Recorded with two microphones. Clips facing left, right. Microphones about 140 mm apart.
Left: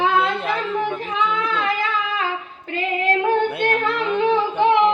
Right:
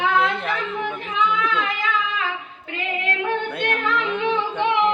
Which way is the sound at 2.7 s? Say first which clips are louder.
Left 6 dB; 35° left (ahead or behind).